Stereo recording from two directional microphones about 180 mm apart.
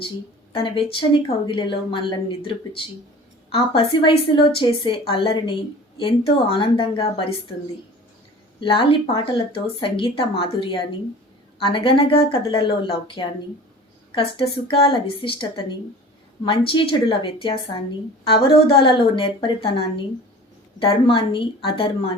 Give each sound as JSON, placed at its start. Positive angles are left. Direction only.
{"t": 0.5, "sound": "speech", "side_deg": 30}
{"t": 8.6, "sound": "speech", "side_deg": 30}